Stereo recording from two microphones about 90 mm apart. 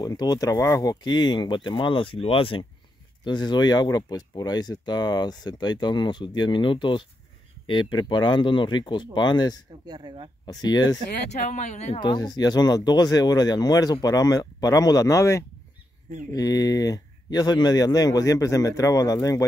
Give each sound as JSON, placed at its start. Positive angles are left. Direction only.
{"t": 0.0, "sound": "speech", "side_deg": 45}
{"t": 1.0, "sound": "speech", "side_deg": 55}
{"t": 3.3, "sound": "speech", "side_deg": 55}
{"t": 9.8, "sound": "speech", "side_deg": -50}
{"t": 10.4, "sound": "speech", "side_deg": 50}